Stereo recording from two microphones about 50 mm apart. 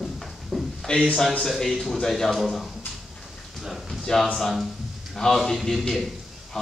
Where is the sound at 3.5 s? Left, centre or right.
Centre.